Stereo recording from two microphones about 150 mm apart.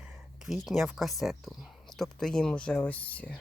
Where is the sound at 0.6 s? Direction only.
Centre (ahead or behind).